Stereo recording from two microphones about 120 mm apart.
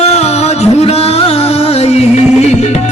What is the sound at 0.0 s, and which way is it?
Music, 60° left (ahead or behind).